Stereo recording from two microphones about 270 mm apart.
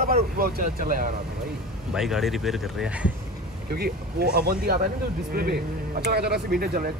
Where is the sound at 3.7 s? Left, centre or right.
Right.